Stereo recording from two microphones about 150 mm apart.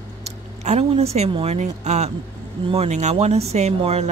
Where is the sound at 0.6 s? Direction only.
45° right (ahead or behind).